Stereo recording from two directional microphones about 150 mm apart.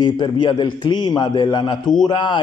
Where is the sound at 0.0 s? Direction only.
30° left (ahead or behind).